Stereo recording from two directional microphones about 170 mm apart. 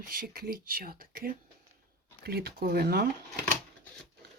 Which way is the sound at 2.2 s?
70° right (ahead or behind).